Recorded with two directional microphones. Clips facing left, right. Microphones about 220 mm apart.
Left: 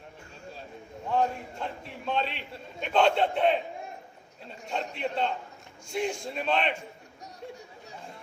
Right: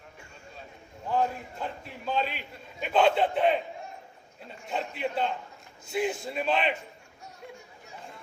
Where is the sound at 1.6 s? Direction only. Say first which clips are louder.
Even; 5° right (ahead or behind).